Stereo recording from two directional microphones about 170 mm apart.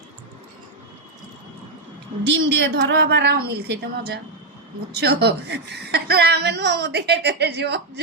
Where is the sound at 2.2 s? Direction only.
90° right.